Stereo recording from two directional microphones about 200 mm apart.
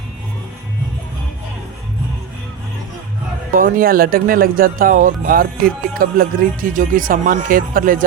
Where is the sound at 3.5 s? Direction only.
45° right (ahead or behind).